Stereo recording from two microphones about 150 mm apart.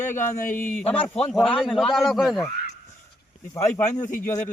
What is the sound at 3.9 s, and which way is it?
Speech, 60° left (ahead or behind).